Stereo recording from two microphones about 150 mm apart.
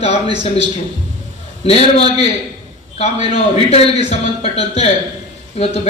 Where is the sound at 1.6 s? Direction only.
45° left (ahead or behind).